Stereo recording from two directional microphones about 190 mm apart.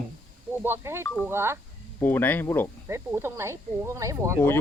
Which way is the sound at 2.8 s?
15° right (ahead or behind).